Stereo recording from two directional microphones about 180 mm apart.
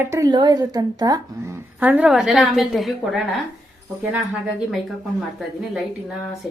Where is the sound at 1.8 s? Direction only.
10° right (ahead or behind).